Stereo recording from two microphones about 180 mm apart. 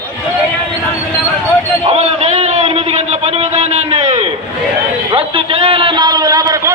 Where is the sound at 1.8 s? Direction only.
35° right (ahead or behind).